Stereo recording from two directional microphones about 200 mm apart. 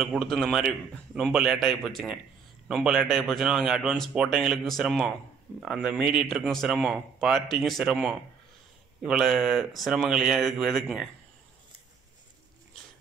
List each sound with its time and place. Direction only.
0.0 s speech: centre (ahead or behind)